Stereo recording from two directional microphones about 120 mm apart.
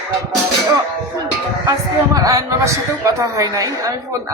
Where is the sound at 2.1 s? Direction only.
30° right (ahead or behind).